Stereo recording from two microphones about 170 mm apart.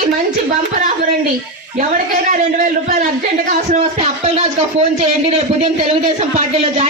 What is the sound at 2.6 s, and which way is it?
Speech, 45° right (ahead or behind).